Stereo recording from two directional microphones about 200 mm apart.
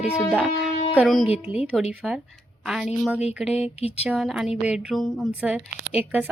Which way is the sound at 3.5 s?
30° left (ahead or behind).